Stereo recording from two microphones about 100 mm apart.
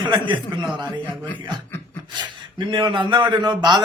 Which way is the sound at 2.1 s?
50° right (ahead or behind).